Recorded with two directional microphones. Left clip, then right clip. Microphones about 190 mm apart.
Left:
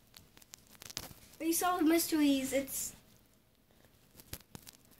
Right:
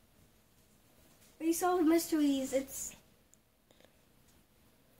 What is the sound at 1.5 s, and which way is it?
Speech, 15° right (ahead or behind).